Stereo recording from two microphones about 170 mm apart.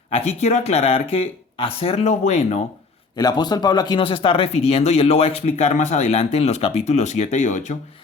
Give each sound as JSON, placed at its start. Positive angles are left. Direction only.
{"t": 0.1, "sound": "speech", "side_deg": 40}
{"t": 3.2, "sound": "speech", "side_deg": 25}